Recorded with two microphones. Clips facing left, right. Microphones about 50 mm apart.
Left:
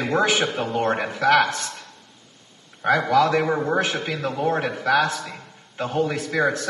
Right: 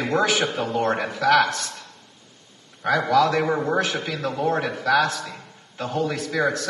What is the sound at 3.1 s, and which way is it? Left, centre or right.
Speech, left.